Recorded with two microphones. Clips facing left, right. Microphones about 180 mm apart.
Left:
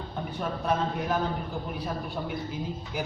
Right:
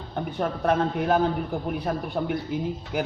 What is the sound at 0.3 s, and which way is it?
Speech, 65° right (ahead or behind).